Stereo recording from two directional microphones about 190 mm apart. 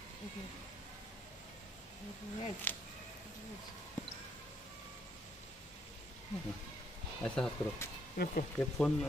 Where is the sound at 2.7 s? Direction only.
10° left (ahead or behind).